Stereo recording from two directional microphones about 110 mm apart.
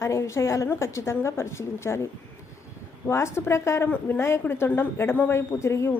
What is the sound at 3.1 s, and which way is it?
A woman's voice, 25° left (ahead or behind).